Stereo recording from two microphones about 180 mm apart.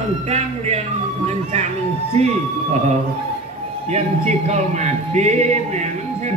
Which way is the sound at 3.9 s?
40° right (ahead or behind).